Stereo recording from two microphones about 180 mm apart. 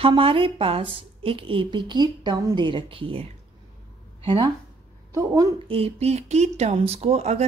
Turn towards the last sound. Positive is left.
turn(degrees=-35)  # may be behind; listen again after turning